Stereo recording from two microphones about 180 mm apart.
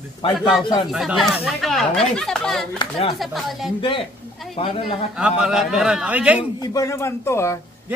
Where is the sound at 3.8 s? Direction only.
30° left (ahead or behind).